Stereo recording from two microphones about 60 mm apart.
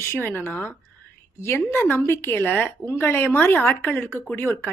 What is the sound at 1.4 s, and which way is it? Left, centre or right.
A woman's voice, left.